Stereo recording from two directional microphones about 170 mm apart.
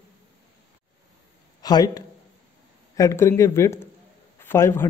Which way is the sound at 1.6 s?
20° left (ahead or behind).